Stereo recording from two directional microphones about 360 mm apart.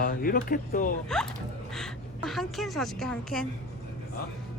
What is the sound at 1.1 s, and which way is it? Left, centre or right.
A woman's voice, centre.